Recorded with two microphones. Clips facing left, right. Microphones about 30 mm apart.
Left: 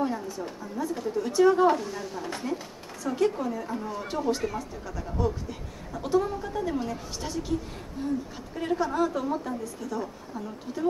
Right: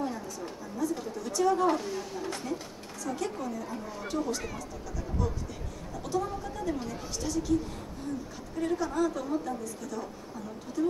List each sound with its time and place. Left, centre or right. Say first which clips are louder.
0.0 s speech: left 5 dB; left
8.5 s speech: left 3 dB; left